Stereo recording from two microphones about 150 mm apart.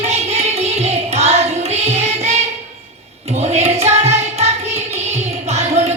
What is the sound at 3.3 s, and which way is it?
Music, 45° right (ahead or behind).